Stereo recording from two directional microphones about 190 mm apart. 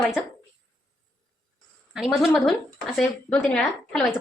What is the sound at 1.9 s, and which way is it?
A woman's voice, 5° right (ahead or behind).